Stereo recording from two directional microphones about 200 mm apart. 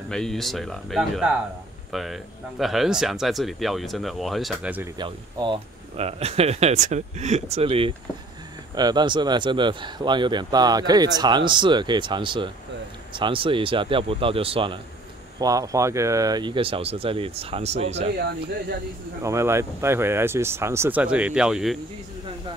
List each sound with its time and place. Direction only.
0.1 s speech: centre (ahead or behind)
4.9 s speech: 25° right (ahead or behind)
19.2 s speech: 15° right (ahead or behind)